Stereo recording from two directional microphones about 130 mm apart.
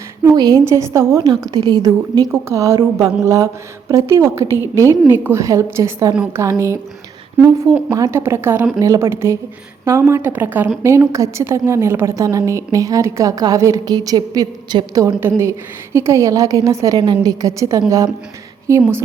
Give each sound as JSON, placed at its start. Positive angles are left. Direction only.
{"t": 0.2, "sound": "a woman's voice", "side_deg": -30}
{"t": 2.1, "sound": "a woman's voice", "side_deg": -25}
{"t": 7.9, "sound": "a woman's voice", "side_deg": -25}
{"t": 15.0, "sound": "a woman's voice", "side_deg": -20}